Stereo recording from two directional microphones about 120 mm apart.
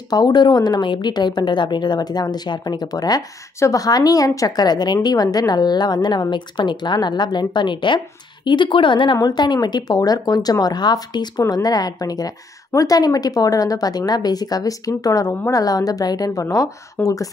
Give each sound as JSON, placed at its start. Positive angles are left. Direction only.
{"t": 0.1, "sound": "speech", "side_deg": 35}